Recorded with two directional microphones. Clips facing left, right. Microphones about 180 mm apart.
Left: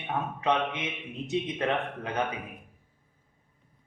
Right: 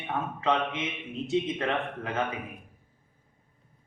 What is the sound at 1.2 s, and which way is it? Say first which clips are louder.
A man's voice: right 1 dB; 20° left (ahead or behind).